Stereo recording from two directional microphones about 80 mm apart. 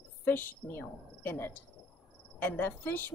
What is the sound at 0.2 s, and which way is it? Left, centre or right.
A woman's voice, left.